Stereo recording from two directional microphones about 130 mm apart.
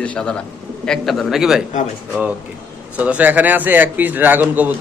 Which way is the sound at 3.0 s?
10° right (ahead or behind).